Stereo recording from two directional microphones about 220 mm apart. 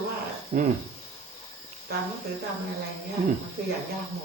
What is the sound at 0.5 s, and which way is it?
Speech, 40° right (ahead or behind).